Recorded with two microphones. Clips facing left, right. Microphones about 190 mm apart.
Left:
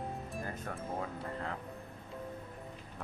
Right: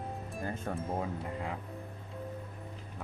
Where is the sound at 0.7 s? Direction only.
25° right (ahead or behind).